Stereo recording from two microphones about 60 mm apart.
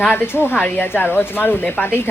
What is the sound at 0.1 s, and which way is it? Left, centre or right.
A woman's voice, left.